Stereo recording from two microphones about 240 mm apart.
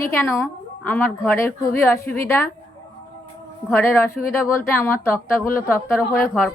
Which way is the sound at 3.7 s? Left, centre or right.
Centre.